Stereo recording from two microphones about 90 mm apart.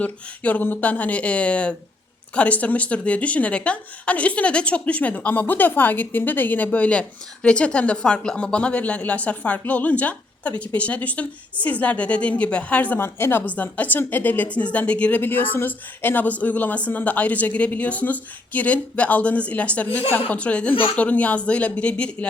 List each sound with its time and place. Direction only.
0.0 s speech: 20° left (ahead or behind)